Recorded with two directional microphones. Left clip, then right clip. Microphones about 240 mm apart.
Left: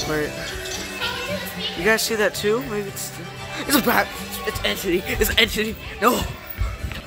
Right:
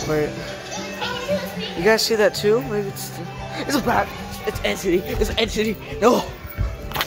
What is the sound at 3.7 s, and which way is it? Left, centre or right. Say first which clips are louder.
Speech: left 1 dB; left.